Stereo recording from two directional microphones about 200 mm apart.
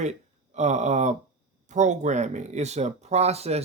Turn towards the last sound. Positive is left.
turn(degrees=-30)  # may be behind; listen again after turning